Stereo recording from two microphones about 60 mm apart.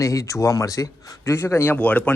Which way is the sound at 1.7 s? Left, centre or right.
Left.